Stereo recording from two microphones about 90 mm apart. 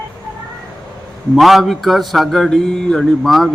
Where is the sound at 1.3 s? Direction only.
Centre (ahead or behind).